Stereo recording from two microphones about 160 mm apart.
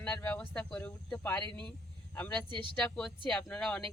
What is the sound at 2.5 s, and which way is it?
Speech, 30° right (ahead or behind).